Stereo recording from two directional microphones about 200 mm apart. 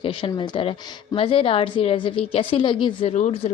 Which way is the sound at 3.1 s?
35° left (ahead or behind).